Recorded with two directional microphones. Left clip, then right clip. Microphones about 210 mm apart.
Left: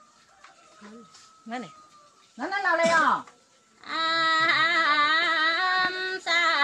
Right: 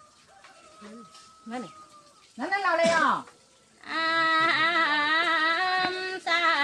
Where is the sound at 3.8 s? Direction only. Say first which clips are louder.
Even; centre (ahead or behind).